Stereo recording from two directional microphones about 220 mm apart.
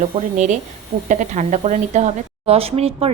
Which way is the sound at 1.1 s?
35° right (ahead or behind).